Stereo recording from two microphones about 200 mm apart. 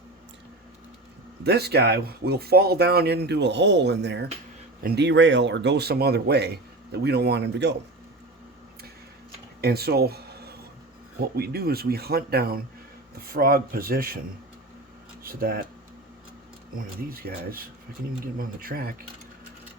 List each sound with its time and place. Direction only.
1.5 s speech: 55° right (ahead or behind)
9.6 s speech: 50° right (ahead or behind)
15.2 s speech: 45° right (ahead or behind)
16.7 s speech: 45° right (ahead or behind)